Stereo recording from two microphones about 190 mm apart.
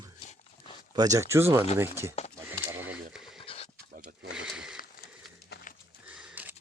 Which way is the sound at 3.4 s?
30° left (ahead or behind).